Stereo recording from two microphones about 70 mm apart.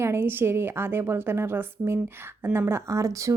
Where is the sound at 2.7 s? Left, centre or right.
Right.